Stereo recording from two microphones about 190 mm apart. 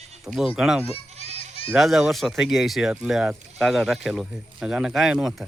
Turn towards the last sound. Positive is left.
turn(degrees=0)  # may be behind; listen again after turning